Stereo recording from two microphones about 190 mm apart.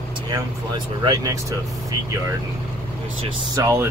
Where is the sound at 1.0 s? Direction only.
20° right (ahead or behind).